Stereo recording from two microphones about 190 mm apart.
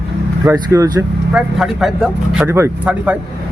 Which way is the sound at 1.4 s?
Centre (ahead or behind).